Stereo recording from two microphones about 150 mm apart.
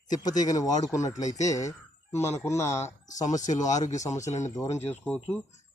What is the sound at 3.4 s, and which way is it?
Speech, 55° left (ahead or behind).